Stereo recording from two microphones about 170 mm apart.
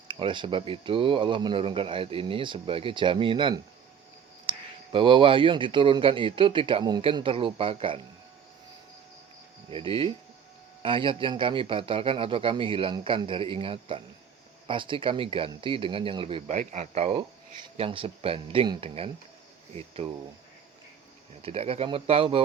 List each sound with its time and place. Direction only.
0.1 s speech: 30° right (ahead or behind)
9.6 s speech: 35° right (ahead or behind)
16.5 s speech: 45° right (ahead or behind)
21.4 s speech: 35° right (ahead or behind)